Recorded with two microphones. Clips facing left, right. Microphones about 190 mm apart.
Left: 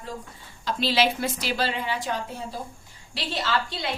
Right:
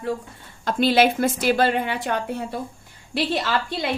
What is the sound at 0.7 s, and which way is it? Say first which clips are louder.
A woman's voice: right 6 dB; 55° right (ahead or behind).